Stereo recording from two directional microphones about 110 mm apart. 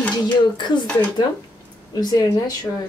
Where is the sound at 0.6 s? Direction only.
45° left (ahead or behind).